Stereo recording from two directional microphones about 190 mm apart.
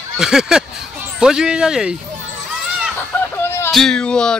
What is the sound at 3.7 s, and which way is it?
Speech, 5° left (ahead or behind).